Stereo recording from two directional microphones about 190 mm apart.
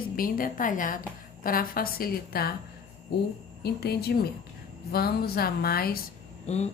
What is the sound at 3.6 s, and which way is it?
A woman's voice, 55° left (ahead or behind).